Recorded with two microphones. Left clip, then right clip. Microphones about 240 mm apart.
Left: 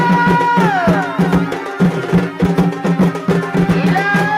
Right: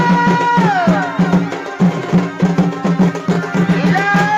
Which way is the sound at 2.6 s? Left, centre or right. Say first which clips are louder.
Even; left.